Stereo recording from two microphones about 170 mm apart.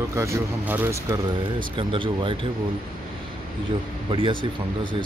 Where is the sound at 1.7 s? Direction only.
30° right (ahead or behind).